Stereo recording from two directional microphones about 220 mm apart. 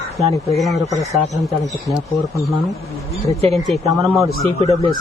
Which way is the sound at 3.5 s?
Centre (ahead or behind).